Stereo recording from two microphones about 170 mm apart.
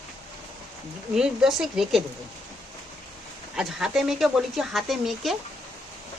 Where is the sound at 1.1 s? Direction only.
5° right (ahead or behind).